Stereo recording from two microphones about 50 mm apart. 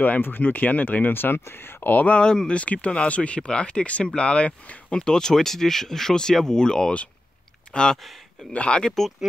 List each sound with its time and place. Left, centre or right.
0.0 s speech: left
1.9 s speech: left
2.2 s speech: centre
4.9 s speech: centre